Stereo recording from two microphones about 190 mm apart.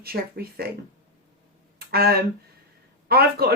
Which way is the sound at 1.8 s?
55° right (ahead or behind).